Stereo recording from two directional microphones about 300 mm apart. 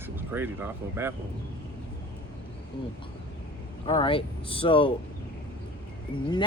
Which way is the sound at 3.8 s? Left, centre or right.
Centre.